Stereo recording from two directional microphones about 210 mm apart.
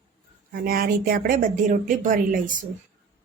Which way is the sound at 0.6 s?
45° right (ahead or behind).